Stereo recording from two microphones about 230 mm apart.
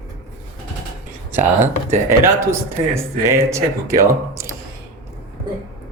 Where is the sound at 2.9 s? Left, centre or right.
Centre.